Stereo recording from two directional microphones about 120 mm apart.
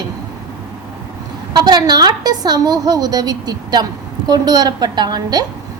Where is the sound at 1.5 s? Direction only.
35° right (ahead or behind).